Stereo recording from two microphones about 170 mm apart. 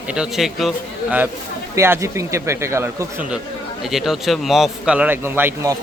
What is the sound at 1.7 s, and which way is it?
A man's voice, 15° right (ahead or behind).